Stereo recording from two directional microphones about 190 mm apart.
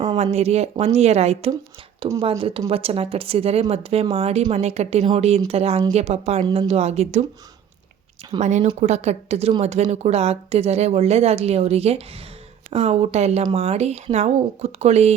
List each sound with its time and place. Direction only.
0.2 s a woman's voice: 35° right (ahead or behind)
8.4 s a woman's voice: 40° right (ahead or behind)